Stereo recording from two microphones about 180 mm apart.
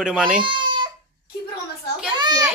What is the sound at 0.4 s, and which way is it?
Baby cry, 25° right (ahead or behind).